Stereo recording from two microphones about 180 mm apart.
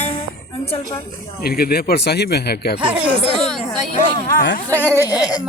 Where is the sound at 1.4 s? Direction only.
55° left (ahead or behind).